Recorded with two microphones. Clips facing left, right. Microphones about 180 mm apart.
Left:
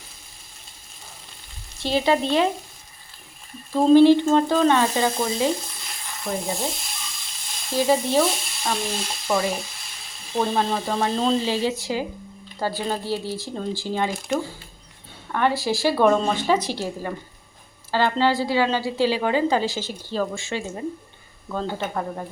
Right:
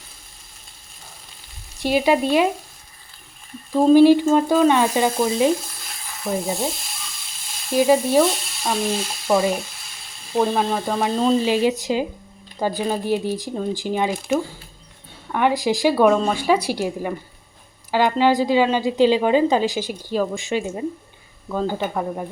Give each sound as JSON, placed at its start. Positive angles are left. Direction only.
{"t": 1.8, "sound": "a woman's voice", "side_deg": -10}
{"t": 3.8, "sound": "a woman's voice", "side_deg": -10}
{"t": 6.2, "sound": "sizzle", "side_deg": 0}
{"t": 7.7, "sound": "a woman's voice", "side_deg": -10}
{"t": 8.2, "sound": "frying", "side_deg": 0}
{"t": 10.3, "sound": "a woman's voice", "side_deg": -5}
{"t": 15.3, "sound": "a woman's voice", "side_deg": -15}